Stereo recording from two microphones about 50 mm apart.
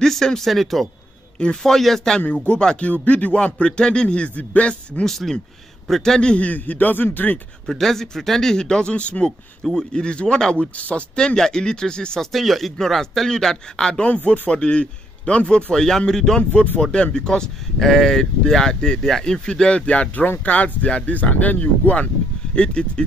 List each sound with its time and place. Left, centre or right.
0.0 s speech: centre
2.4 s a man's voice: centre
5.0 s speech: centre
6.3 s speech: left
7.6 s speech: centre
12.3 s speech: centre
14.0 s a man's voice: left